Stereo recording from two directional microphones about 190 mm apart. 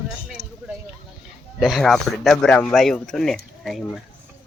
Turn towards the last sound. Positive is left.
turn(degrees=0)  # may be behind; listen again after turning